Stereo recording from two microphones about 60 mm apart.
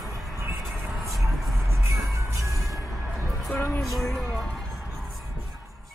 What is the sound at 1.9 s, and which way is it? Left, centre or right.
Music, right.